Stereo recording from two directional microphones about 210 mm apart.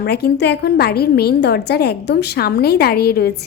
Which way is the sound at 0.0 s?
50° left (ahead or behind).